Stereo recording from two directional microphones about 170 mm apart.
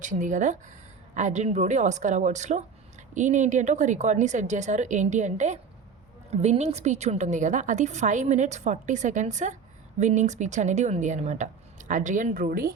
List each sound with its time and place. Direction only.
0.0 s a woman's voice: 50° right (ahead or behind)